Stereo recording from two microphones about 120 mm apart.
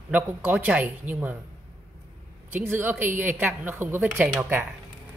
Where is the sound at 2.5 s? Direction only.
15° right (ahead or behind).